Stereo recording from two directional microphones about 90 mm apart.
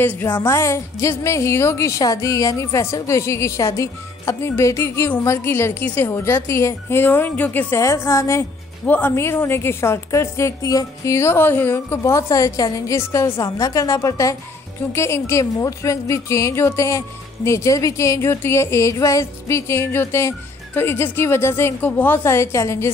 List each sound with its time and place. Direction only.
0.0 s a woman's voice: 20° left (ahead or behind)
7.8 s a woman's voice: 30° left (ahead or behind)
8.8 s speech: 20° left (ahead or behind); by 11.1 s 40° left (ahead or behind)
11.1 s a woman's voice: 25° left (ahead or behind)